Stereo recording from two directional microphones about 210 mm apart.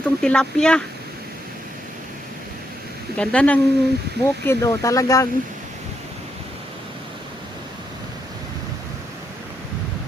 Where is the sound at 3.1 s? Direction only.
5° left (ahead or behind).